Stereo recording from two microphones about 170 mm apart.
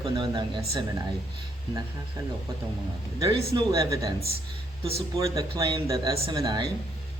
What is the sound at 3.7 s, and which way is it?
Speech, 20° right (ahead or behind).